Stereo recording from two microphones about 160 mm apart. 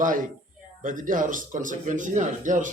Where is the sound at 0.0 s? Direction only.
55° right (ahead or behind).